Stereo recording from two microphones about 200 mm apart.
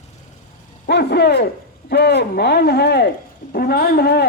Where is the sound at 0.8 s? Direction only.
55° left (ahead or behind).